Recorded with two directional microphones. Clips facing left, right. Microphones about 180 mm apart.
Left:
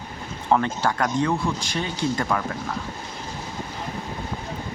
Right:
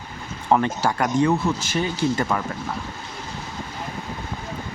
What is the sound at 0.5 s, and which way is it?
Speech, 10° right (ahead or behind).